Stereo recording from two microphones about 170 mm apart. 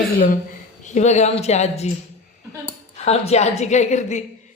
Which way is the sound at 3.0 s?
40° left (ahead or behind).